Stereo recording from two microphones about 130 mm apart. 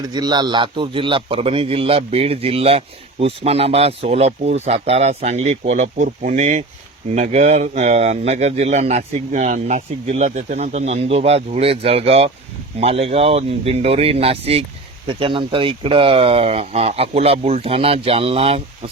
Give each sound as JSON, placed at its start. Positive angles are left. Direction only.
{"t": 0.1, "sound": "a man's voice", "side_deg": -35}